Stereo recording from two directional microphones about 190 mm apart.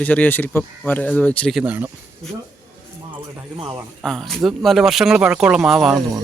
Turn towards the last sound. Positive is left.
turn(degrees=0)  # may be behind; listen again after turning